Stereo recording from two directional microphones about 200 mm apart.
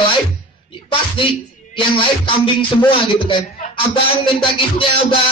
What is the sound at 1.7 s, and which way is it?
A man's voice, 25° left (ahead or behind).